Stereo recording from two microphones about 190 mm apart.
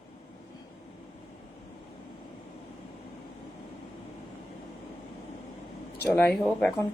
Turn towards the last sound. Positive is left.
turn(degrees=10)  # may be behind; listen again after turning